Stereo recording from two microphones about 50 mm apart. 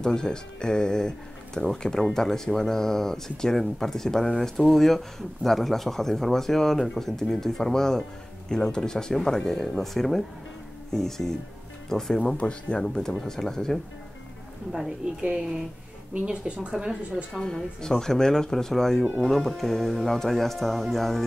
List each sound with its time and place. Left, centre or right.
0.0 s speech: centre
12.3 s speech: left
12.8 s speech: centre
15.0 s a woman's voice: right
16.3 s a woman's voice: right
17.3 s speech: centre